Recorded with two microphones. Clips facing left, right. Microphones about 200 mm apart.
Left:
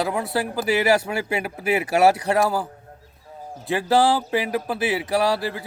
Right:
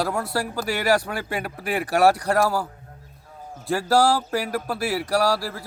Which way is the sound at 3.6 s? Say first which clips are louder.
Left 1 dB; centre (ahead or behind).